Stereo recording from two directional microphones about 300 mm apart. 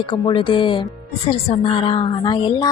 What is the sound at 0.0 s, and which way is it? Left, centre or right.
A woman's voice, centre.